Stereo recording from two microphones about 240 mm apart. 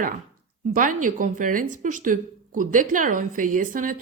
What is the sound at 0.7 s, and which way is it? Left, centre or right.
A woman's voice, right.